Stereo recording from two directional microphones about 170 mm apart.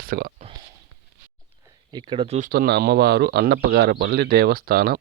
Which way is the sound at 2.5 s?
65° right (ahead or behind).